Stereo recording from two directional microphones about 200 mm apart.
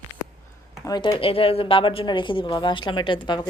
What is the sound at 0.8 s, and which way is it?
A woman's voice, 20° left (ahead or behind).